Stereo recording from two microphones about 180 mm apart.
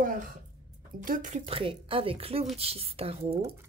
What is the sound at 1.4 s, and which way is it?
A woman's voice, 30° right (ahead or behind).